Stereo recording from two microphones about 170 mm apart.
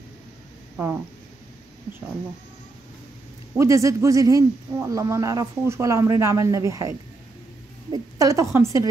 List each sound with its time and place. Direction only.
3.5 s a man's voice: 20° right (ahead or behind)